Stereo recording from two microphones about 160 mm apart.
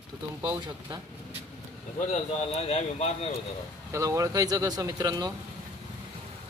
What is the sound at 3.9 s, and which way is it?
Speech, 20° right (ahead or behind).